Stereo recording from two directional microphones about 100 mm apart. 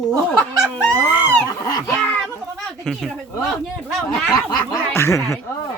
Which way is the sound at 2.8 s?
Centre (ahead or behind).